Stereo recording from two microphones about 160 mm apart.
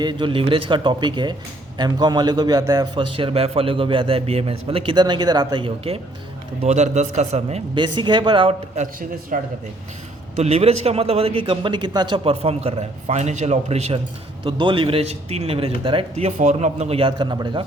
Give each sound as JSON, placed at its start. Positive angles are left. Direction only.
{"t": 0.0, "sound": "a man's voice", "side_deg": -30}
{"t": 6.6, "sound": "a man's voice", "side_deg": -45}
{"t": 7.8, "sound": "a man's voice", "side_deg": -30}
{"t": 10.3, "sound": "a man's voice", "side_deg": -40}